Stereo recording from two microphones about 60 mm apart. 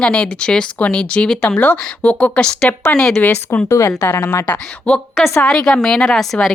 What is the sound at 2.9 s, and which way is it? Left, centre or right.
Speech, centre.